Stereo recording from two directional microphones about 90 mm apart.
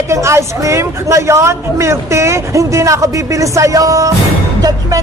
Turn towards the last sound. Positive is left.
turn(degrees=-40)  # may be behind; listen again after turning